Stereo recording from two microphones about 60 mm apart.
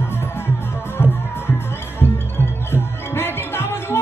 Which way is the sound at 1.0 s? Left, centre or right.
Left.